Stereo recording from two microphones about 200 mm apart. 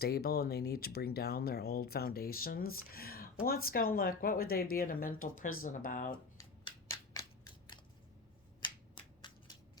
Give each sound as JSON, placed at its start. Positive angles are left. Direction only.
{"t": 0.0, "sound": "speech", "side_deg": 50}
{"t": 6.3, "sound": "scissors", "side_deg": 20}
{"t": 9.0, "sound": "a sound", "side_deg": 20}